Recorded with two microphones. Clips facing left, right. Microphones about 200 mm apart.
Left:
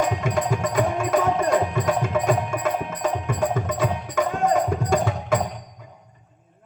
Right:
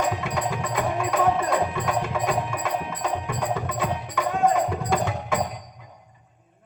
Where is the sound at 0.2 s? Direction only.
45° left (ahead or behind).